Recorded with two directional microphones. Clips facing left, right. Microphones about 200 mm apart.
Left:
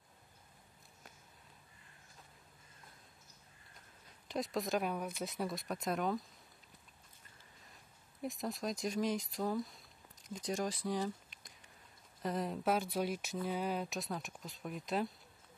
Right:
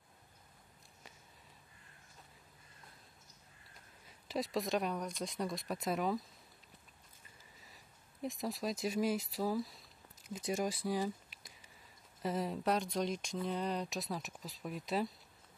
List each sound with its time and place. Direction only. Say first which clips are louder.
4.3 s speech: right 1 dB; centre (ahead or behind)
7.6 s speech: right 1 dB; centre (ahead or behind)